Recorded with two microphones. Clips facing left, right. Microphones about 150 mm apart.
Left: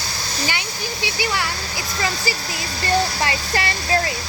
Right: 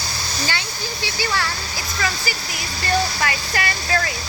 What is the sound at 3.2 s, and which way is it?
Speech, 25° left (ahead or behind).